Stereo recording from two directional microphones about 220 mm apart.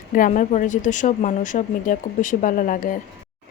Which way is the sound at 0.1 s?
35° left (ahead or behind).